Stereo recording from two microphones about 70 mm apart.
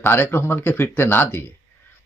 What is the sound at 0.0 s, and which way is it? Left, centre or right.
Speech, left.